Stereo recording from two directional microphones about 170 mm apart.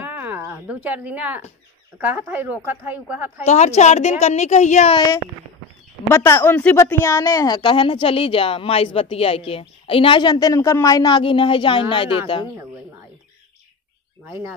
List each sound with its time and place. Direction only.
0.0 s a sound: 10° right (ahead or behind)
2.0 s a woman's voice: 10° right (ahead or behind)
3.4 s a woman's voice: 40° left (ahead or behind)
6.0 s a woman's voice: 15° left (ahead or behind)